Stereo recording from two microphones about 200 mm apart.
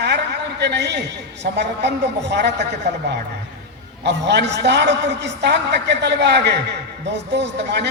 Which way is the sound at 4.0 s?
60° right (ahead or behind).